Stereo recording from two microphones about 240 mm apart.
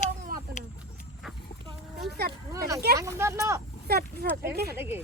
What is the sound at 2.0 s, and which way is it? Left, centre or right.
Speech, right.